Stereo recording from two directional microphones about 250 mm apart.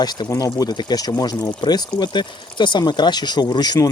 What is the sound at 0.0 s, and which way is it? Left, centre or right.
Speech, centre.